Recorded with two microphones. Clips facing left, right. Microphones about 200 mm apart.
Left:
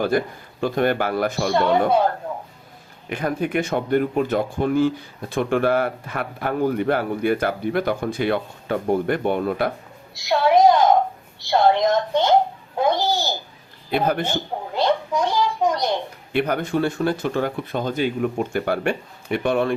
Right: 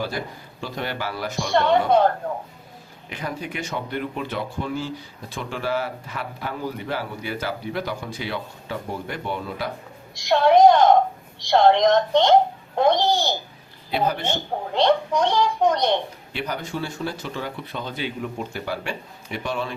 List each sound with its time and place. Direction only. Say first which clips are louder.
0.6 s speech: left 9 dB; 55° left (ahead or behind)
3.1 s speech: left 8 dB; 55° left (ahead or behind)
10.2 s a woman's voice: right 1 dB; 5° left (ahead or behind)
13.9 s speech: left 3 dB; 55° left (ahead or behind)
14.8 s a woman's voice: right 1 dB; 5° left (ahead or behind)
16.3 s speech: left 8 dB; 55° left (ahead or behind)